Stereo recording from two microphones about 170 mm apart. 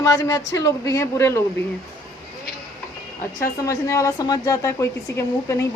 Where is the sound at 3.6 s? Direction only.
20° left (ahead or behind).